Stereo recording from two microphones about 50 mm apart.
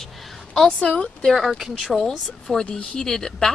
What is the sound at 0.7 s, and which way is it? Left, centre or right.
Speech, centre.